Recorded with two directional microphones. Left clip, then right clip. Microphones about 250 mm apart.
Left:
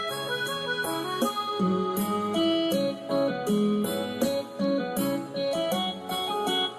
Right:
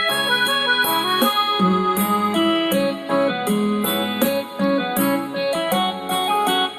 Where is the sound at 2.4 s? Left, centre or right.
Centre.